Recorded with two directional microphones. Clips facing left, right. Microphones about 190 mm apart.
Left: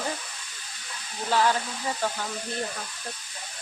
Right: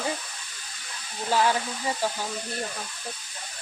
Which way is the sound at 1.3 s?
15° right (ahead or behind).